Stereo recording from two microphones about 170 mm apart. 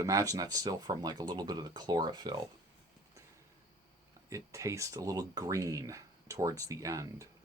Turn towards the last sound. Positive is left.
turn(degrees=-20)  # may be behind; listen again after turning